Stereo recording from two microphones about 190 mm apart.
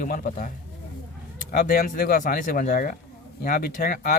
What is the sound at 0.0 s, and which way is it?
Speech, 45° left (ahead or behind).